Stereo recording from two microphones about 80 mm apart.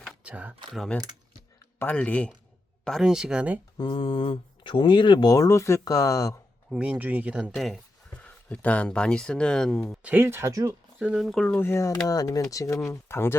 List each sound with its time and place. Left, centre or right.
0.3 s speech: centre
2.0 s speech: centre
3.0 s speech: centre
3.8 s speech: left
6.7 s speech: centre
7.5 s speech: centre
8.1 s speech: centre
10.0 s speech: right
10.5 s speech: right
11.0 s speech: centre
11.3 s speech: centre
11.5 s speech: left
12.0 s speech: left